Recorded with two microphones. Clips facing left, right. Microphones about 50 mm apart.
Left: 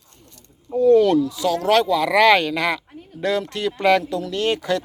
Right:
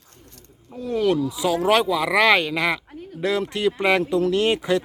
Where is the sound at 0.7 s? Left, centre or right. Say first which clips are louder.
Left 7 dB; centre.